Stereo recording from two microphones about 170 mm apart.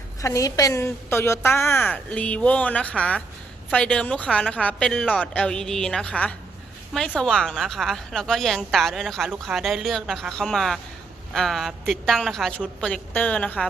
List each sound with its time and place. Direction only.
0.2 s a woman's voice: 20° left (ahead or behind)